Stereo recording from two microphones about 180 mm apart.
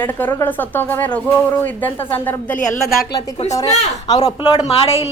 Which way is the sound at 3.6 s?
35° left (ahead or behind).